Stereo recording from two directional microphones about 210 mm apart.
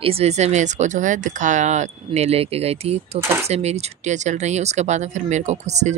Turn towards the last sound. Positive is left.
turn(degrees=-35)  # may be behind; listen again after turning